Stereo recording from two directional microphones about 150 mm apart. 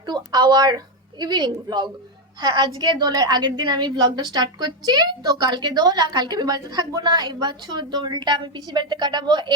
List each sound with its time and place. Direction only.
0.0 s a woman's voice: 30° right (ahead or behind)